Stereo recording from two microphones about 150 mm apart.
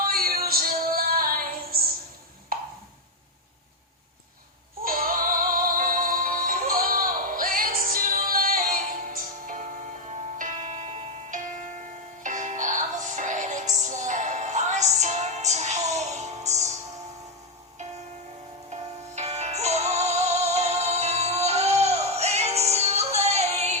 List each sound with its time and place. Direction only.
0.1 s music: 80° right
2.5 s a sound: 75° right (ahead or behind)
4.8 s music: 70° right (ahead or behind); by 16.7 s 50° right (ahead or behind)
18.7 s music: 50° right (ahead or behind)